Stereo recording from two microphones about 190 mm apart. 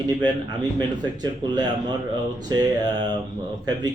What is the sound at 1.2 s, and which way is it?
Speech, 20° right (ahead or behind).